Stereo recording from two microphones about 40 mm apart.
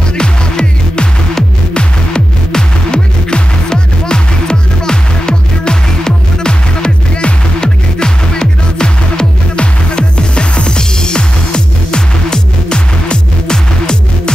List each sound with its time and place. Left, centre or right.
0.2 s music: left